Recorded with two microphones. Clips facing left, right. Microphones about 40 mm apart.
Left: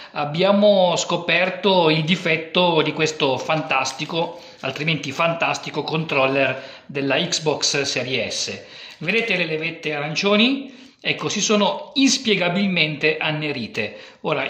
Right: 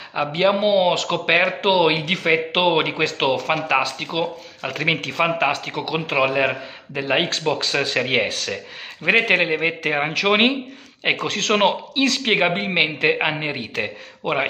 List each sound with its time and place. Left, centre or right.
0.1 s speech: centre
4.7 s speech: centre
7.2 s speech: right
9.0 s speech: centre